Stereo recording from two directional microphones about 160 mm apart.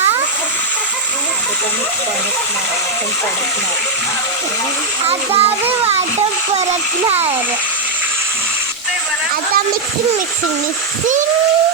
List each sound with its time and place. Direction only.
5.0 s a child's voice: 35° right (ahead or behind)